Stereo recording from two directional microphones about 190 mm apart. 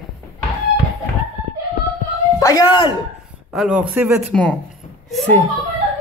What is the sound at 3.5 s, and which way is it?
Speech, centre (ahead or behind).